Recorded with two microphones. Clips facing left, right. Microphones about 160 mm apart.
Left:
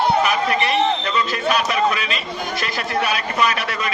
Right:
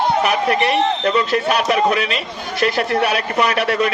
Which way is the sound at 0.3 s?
60° right (ahead or behind).